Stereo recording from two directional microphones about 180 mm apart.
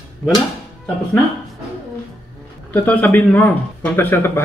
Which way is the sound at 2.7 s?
10° left (ahead or behind).